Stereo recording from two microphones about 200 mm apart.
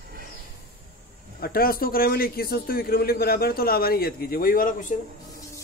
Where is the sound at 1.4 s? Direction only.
45° left (ahead or behind).